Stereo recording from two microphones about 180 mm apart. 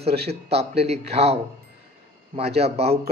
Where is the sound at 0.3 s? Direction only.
35° right (ahead or behind).